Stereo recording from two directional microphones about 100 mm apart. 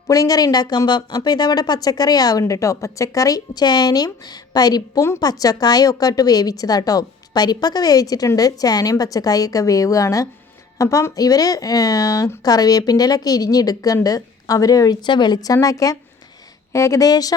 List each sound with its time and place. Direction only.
0.1 s a woman's voice: 40° left (ahead or behind)